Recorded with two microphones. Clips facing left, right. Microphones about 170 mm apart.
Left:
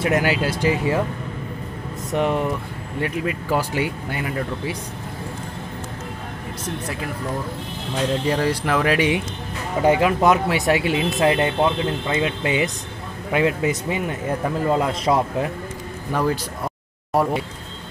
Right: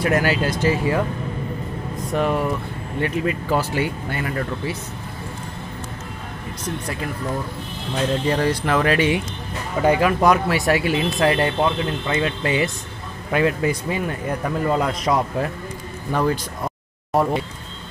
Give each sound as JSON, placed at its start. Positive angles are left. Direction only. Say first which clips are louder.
{"t": 0.0, "sound": "speech", "louder": "even", "side_deg": 15}
{"t": 2.0, "sound": "speech", "louder": "even", "side_deg": 20}
{"t": 3.0, "sound": "speech", "louder": "right 2 dB", "side_deg": 5}
{"t": 8.3, "sound": "speech", "louder": "right 2 dB", "side_deg": 5}
{"t": 9.8, "sound": "speech", "louder": "even", "side_deg": 20}
{"t": 16.1, "sound": "a sound", "louder": "right 1 dB", "side_deg": 5}